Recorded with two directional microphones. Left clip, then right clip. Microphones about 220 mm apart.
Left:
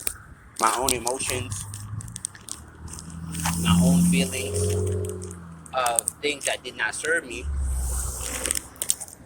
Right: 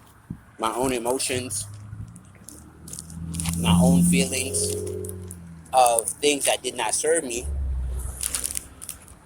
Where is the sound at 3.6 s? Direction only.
25° right (ahead or behind).